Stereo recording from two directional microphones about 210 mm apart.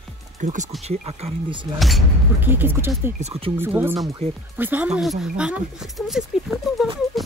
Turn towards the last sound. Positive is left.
turn(degrees=0)  # may be behind; listen again after turning